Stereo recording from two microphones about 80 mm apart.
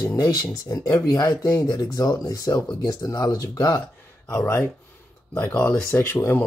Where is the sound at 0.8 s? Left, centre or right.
Left.